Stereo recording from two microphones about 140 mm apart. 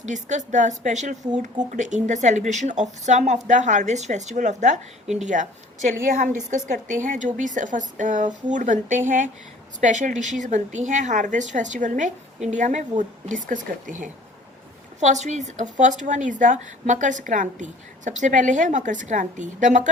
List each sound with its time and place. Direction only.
0.0 s a woman's voice: 60° right (ahead or behind)